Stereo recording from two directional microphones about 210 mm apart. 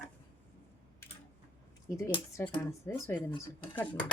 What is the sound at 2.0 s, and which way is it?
Speech, 15° left (ahead or behind).